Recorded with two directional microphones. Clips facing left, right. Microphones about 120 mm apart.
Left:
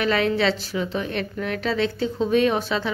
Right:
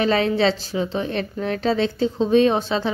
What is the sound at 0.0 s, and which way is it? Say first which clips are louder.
A woman's voice: right 2 dB; 30° right (ahead or behind).